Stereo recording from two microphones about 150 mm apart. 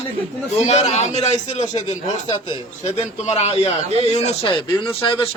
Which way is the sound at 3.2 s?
45° left (ahead or behind).